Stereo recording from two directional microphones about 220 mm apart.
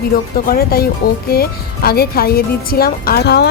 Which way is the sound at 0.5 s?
45° left (ahead or behind).